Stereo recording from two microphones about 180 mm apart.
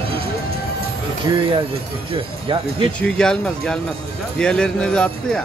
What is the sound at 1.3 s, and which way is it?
Speech, 20° right (ahead or behind).